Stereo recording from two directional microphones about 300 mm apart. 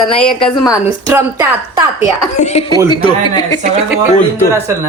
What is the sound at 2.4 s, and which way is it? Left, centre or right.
A woman's voice, left.